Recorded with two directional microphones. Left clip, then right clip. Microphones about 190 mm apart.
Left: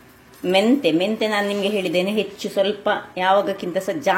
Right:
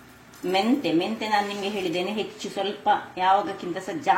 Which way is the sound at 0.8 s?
60° left (ahead or behind).